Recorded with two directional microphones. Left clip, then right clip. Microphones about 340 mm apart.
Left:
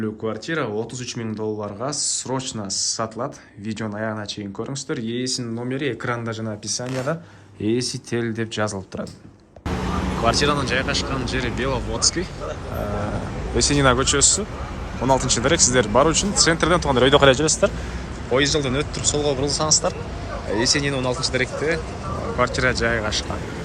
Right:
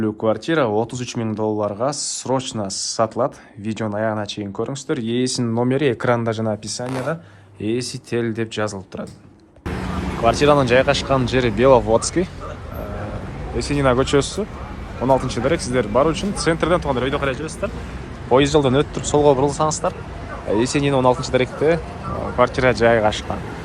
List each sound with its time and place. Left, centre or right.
0.0 s speech: centre
10.2 s speech: centre
13.6 s speech: centre
18.3 s speech: centre
21.4 s speech: right
22.4 s speech: centre